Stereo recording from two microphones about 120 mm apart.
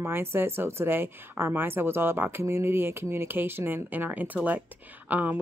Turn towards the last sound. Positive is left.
turn(degrees=-15)  # may be behind; listen again after turning